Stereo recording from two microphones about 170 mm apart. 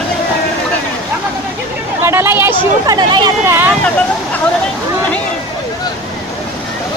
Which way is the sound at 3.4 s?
15° right (ahead or behind).